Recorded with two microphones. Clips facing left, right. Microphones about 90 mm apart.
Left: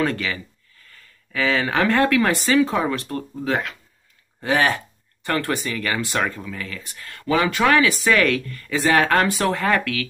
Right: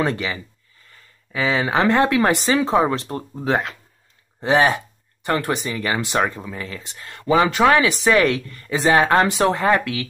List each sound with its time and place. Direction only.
0.0 s speech: 20° right (ahead or behind)